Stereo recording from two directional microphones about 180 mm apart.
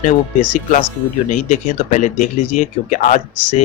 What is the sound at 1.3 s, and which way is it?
Speech, 45° left (ahead or behind).